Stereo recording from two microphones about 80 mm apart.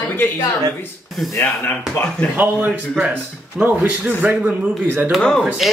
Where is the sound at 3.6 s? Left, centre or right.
Centre.